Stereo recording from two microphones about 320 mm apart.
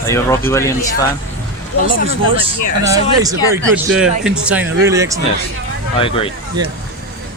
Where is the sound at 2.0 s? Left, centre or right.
Centre.